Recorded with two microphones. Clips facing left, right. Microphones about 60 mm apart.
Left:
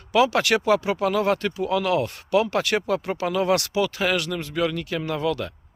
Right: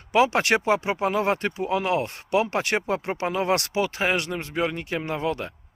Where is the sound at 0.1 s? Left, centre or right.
Right.